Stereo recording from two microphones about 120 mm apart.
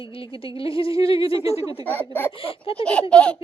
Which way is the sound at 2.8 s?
10° left (ahead or behind).